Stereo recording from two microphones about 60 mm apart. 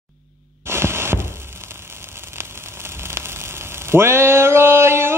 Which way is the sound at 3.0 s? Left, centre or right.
Right.